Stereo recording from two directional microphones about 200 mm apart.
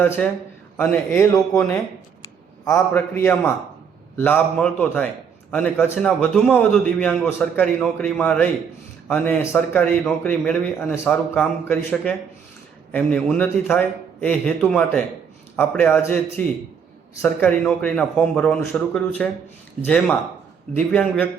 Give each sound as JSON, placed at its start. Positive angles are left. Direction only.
{"t": 0.0, "sound": "a man's voice", "side_deg": 10}
{"t": 2.6, "sound": "a man's voice", "side_deg": 15}